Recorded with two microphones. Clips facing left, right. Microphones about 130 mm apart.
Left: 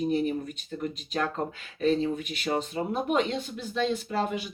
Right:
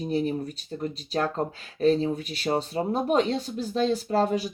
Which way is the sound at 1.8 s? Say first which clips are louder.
Right 3 dB; 35° right (ahead or behind).